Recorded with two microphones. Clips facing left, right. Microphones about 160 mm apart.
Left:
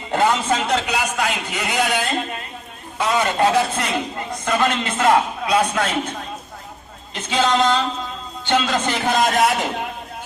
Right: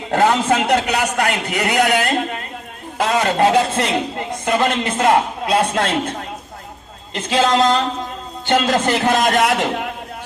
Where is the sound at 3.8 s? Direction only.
35° right (ahead or behind).